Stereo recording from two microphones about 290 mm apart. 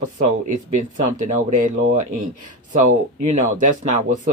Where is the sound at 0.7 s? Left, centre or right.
Right.